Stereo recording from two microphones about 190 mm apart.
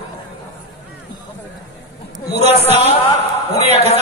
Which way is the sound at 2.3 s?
35° right (ahead or behind).